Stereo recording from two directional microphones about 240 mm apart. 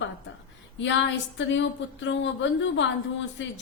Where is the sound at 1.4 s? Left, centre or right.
Left.